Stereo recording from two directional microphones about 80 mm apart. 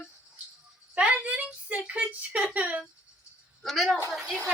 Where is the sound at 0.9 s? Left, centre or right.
Centre.